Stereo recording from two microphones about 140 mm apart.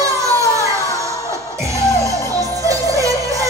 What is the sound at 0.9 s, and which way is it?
Music, 20° right (ahead or behind).